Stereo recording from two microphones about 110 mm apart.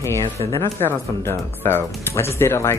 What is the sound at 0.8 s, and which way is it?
Speech, 20° left (ahead or behind).